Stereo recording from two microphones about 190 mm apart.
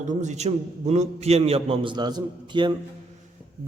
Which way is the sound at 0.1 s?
40° right (ahead or behind).